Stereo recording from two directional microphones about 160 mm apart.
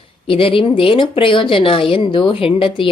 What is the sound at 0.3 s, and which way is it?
A woman's voice, 35° left (ahead or behind).